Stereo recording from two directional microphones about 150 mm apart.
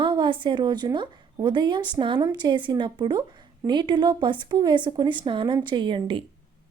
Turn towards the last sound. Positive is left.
turn(degrees=-35)  # may be behind; listen again after turning